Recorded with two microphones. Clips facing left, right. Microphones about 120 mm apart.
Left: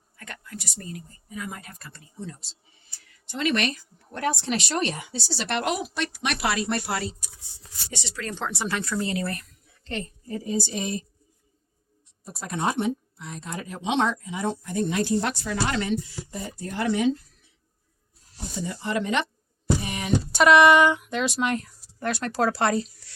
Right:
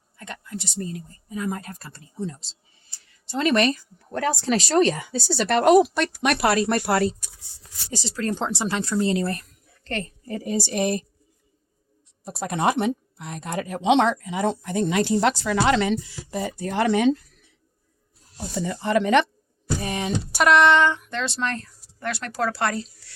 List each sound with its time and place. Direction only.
0.2 s speech: 25° right (ahead or behind)
3.2 s speech: 40° right (ahead or behind)
7.9 s speech: 35° right (ahead or behind)
9.8 s a woman's voice: 60° right (ahead or behind)
12.2 s speech: 80° right
18.6 s a woman's voice: 65° right (ahead or behind)
19.8 s music: 35° right (ahead or behind)
20.3 s a woman's voice: centre (ahead or behind); by 22.9 s 20° left (ahead or behind)